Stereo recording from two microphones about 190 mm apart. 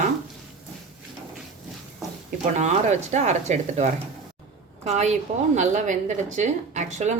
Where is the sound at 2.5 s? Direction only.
40° right (ahead or behind).